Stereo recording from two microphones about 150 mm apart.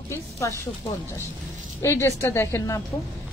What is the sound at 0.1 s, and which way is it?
Speech, 20° left (ahead or behind).